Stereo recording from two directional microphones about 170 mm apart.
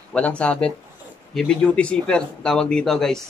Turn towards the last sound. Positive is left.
turn(degrees=0)  # may be behind; listen again after turning